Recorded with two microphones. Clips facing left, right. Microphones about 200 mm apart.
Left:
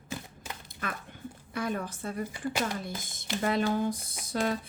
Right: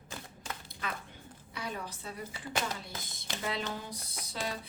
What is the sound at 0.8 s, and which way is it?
A woman's voice, 50° left (ahead or behind).